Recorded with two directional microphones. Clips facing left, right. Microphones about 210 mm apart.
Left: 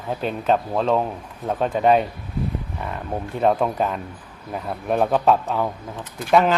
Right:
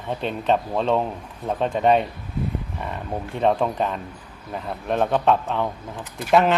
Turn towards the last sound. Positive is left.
turn(degrees=0)  # may be behind; listen again after turning